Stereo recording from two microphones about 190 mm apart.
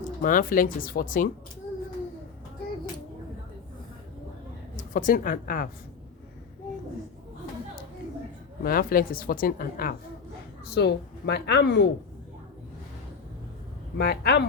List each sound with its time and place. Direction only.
0.0 s a woman's voice: 45° left (ahead or behind)
4.8 s a woman's voice: 40° left (ahead or behind)
8.6 s a woman's voice: 50° left (ahead or behind)
14.0 s a woman's voice: 55° left (ahead or behind)